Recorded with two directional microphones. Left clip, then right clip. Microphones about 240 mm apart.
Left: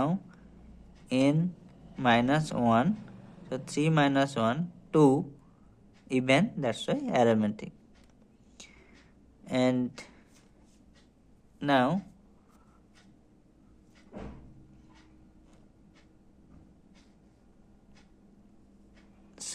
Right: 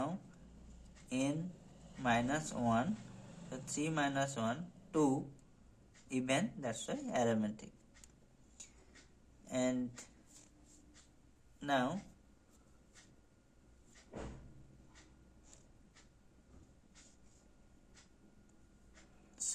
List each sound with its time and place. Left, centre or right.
1.1 s speech: left
9.5 s speech: left
11.6 s speech: left